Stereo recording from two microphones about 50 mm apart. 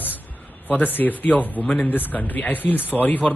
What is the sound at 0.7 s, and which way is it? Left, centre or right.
A man's voice, left.